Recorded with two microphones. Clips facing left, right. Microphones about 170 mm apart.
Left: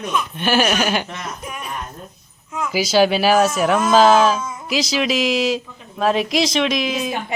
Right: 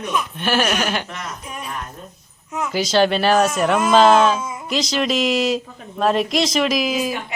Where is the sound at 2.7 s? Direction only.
5° left (ahead or behind).